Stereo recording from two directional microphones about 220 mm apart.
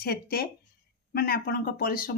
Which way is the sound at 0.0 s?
45° left (ahead or behind).